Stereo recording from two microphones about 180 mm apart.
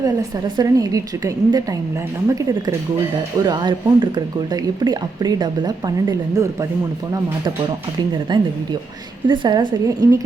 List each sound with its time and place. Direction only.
0.0 s speech: 20° right (ahead or behind)
8.3 s speech: 25° right (ahead or behind)